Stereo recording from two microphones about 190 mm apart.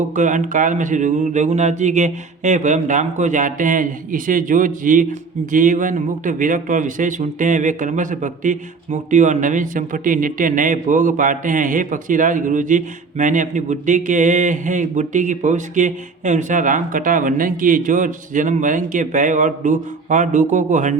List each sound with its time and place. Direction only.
0.2 s a man's voice: 40° right (ahead or behind)